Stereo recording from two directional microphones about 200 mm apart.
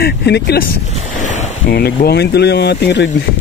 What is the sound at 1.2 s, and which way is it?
Ocean, 35° left (ahead or behind).